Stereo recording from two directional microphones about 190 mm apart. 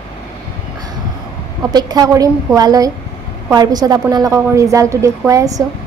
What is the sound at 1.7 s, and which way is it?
A woman's voice, 20° right (ahead or behind).